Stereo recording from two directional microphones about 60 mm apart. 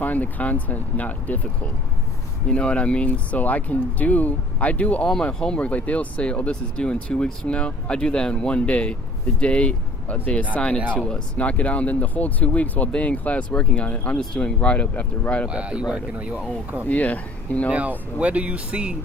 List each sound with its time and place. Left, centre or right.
0.0 s speech: left
15.4 s a man's voice: centre
16.9 s speech: left
17.7 s speech: right